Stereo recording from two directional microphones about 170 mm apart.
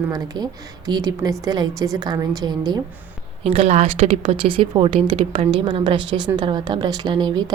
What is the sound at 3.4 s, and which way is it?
A woman's voice, 35° right (ahead or behind).